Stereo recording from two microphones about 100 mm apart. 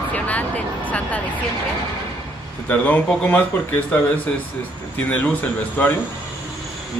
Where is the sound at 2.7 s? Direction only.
15° left (ahead or behind).